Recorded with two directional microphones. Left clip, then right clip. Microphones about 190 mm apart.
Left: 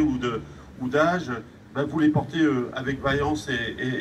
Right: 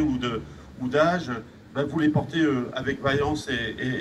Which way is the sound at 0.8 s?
20° right (ahead or behind).